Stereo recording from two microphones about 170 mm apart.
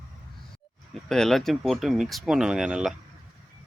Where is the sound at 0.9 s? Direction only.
Centre (ahead or behind).